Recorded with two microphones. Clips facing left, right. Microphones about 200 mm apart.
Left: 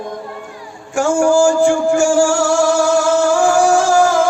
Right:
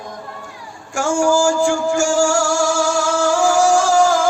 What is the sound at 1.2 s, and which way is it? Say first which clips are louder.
Music: left 3 dB; 60° left (ahead or behind).